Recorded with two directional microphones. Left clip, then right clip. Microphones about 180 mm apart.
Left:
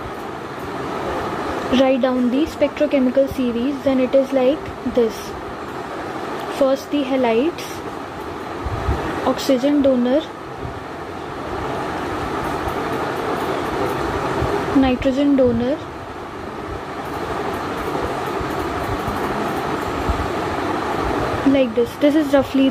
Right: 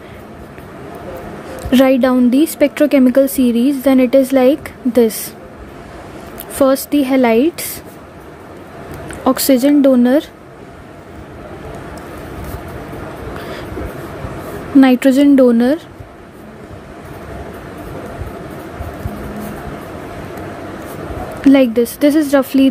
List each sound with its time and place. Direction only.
1.7 s speech: 40° right (ahead or behind)
6.6 s speech: 45° right (ahead or behind)
9.2 s speech: 50° right (ahead or behind)
14.8 s speech: 45° right (ahead or behind)
21.5 s speech: 35° right (ahead or behind)